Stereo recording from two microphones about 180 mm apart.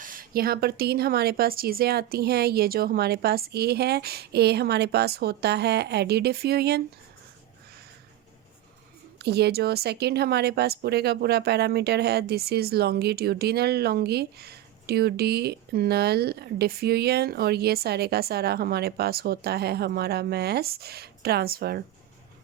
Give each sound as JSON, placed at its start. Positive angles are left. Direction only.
{"t": 0.0, "sound": "speech", "side_deg": -50}
{"t": 9.1, "sound": "speech", "side_deg": -65}